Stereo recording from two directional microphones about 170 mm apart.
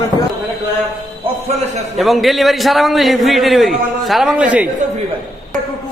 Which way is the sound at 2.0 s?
Centre (ahead or behind).